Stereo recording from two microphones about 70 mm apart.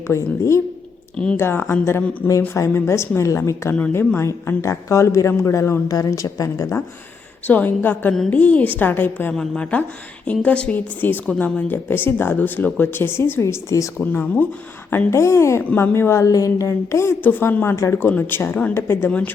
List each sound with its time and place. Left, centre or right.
0.1 s speech: left
1.1 s speech: centre
1.4 s a woman's voice: left
5.9 s a woman's voice: left
7.4 s a woman's voice: left
9.3 s a woman's voice: centre; by 13.4 s left
13.4 s speech: left
14.0 s a woman's voice: left
15.1 s a woman's voice: left
17.2 s a woman's voice: left